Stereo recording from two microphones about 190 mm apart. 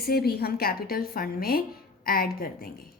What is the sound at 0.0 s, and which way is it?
Speech, 55° left (ahead or behind).